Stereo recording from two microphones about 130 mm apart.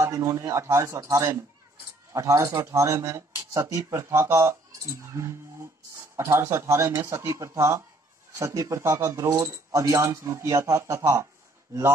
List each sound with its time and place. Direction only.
0.0 s speech: 25° right (ahead or behind)